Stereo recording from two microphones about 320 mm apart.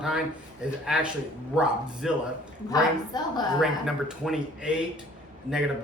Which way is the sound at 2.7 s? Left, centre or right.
Centre.